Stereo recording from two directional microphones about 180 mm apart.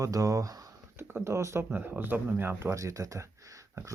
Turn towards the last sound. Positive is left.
turn(degrees=-15)  # may be behind; listen again after turning